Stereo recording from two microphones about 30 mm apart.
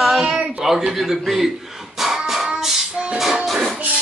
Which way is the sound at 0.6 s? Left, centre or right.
Centre.